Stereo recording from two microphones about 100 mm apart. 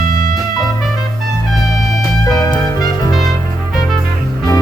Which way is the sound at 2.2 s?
35° left (ahead or behind).